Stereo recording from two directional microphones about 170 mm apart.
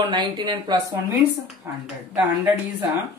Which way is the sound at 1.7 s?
15° right (ahead or behind).